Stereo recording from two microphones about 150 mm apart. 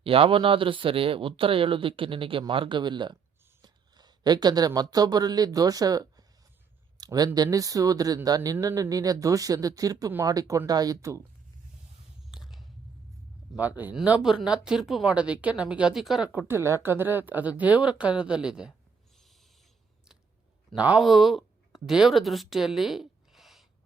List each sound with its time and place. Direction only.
0.0 s speech: 40° right (ahead or behind); by 11.2 s 20° right (ahead or behind)
12.3 s a sound: 5° right (ahead or behind)
13.6 s a woman's voice: 10° right (ahead or behind)
16.5 s speech: 15° right (ahead or behind)
20.7 s speech: 10° right (ahead or behind)